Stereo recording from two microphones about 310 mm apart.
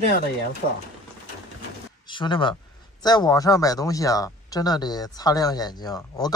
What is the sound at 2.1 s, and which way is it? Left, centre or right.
Speech, centre.